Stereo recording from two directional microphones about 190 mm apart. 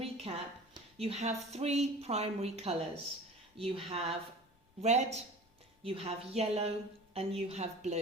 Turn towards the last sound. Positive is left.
turn(degrees=-35)  # may be behind; listen again after turning